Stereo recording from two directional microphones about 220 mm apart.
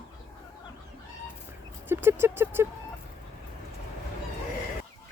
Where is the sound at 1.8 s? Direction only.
10° right (ahead or behind).